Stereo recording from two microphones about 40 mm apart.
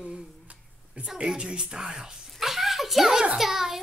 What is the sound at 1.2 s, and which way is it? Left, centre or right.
Speech, right.